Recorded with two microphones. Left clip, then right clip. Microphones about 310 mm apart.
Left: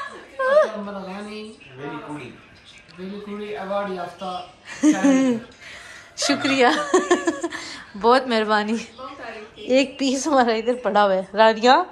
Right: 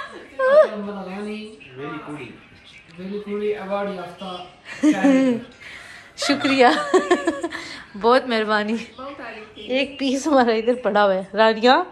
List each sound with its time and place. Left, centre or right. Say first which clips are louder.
0.4 s chuckle: right 3 dB; centre
4.6 s speech: even; centre